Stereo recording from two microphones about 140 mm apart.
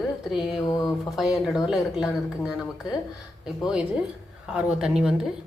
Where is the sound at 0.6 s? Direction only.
25° left (ahead or behind).